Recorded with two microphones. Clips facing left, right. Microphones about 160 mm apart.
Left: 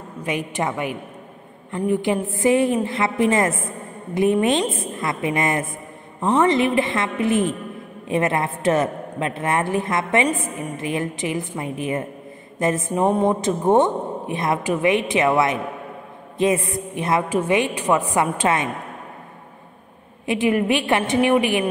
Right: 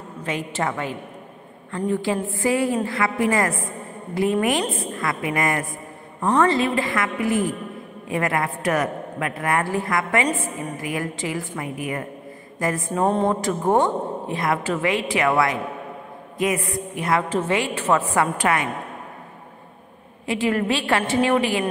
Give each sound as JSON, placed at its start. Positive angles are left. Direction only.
{"t": 0.2, "sound": "a woman's voice", "side_deg": 15}
{"t": 20.2, "sound": "a woman's voice", "side_deg": 20}